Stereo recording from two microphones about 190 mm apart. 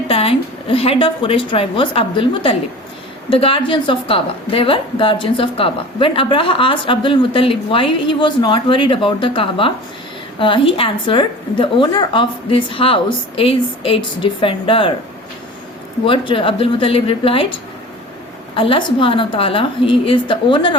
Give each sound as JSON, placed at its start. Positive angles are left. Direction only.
{"t": 0.1, "sound": "a woman's voice", "side_deg": 30}
{"t": 16.0, "sound": "a woman's voice", "side_deg": 25}